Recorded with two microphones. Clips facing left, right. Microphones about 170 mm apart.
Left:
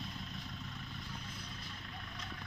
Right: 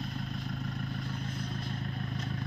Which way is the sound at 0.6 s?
60° right (ahead or behind).